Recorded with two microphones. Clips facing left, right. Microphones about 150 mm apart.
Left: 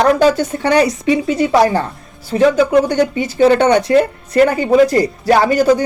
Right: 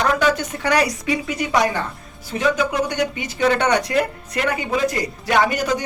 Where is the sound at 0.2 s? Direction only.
30° left (ahead or behind).